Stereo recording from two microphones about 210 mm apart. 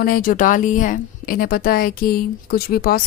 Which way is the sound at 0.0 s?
45° left (ahead or behind).